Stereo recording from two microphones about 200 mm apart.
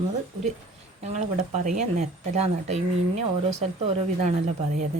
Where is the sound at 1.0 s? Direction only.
35° right (ahead or behind).